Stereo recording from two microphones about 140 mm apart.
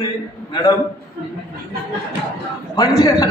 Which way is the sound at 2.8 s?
25° left (ahead or behind).